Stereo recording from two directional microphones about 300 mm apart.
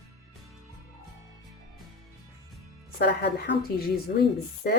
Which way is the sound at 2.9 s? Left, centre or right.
Left.